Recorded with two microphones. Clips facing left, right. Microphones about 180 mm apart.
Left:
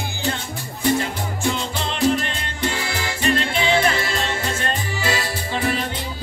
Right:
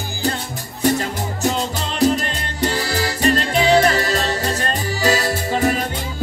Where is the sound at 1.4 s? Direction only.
40° right (ahead or behind).